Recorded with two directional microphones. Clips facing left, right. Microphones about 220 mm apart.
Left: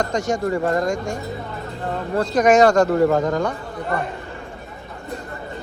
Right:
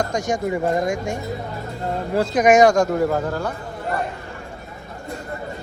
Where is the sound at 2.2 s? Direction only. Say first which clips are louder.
Left 2 dB; centre (ahead or behind).